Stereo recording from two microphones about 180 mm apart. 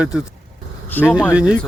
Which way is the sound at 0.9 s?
10° left (ahead or behind).